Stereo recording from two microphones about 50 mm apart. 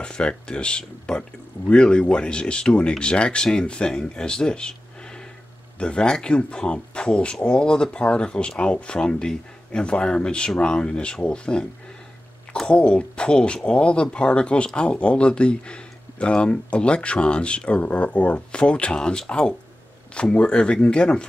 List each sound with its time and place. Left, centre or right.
0.0 s speech: centre
12.6 s speech: left